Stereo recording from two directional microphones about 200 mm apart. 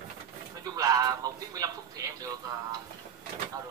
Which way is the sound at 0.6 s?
15° right (ahead or behind).